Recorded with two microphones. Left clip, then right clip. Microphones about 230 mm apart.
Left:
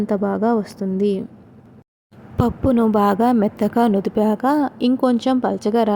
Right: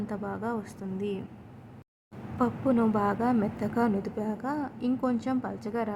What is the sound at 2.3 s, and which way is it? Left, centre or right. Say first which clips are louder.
Speech: left 8 dB; left.